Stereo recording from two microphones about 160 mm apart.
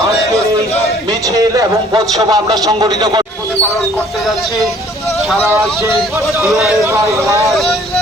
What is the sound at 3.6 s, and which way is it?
Speech, centre (ahead or behind).